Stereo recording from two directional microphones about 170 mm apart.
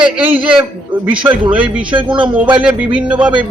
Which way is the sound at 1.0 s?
10° right (ahead or behind).